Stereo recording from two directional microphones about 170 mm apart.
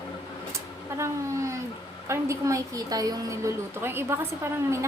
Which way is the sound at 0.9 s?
15° right (ahead or behind).